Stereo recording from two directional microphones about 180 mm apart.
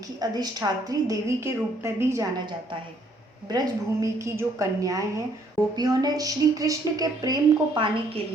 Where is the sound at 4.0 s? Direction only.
15° right (ahead or behind).